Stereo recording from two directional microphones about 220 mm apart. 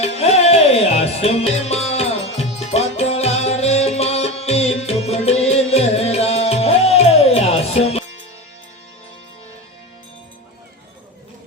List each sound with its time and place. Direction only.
0.0 s music: 30° left (ahead or behind)